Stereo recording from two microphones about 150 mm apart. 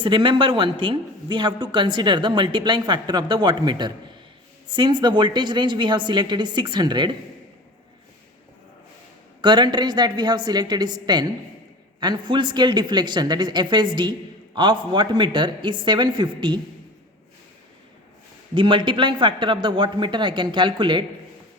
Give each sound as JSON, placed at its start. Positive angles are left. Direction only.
{"t": 0.0, "sound": "speech", "side_deg": -35}
{"t": 9.4, "sound": "a woman's voice", "side_deg": -30}
{"t": 18.5, "sound": "speech", "side_deg": -30}